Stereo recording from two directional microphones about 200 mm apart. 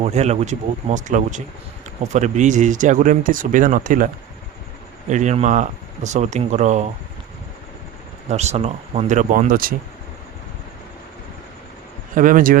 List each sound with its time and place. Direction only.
0.0 s speech: 35° right (ahead or behind)
8.3 s speech: 35° right (ahead or behind)
12.1 s speech: 40° right (ahead or behind)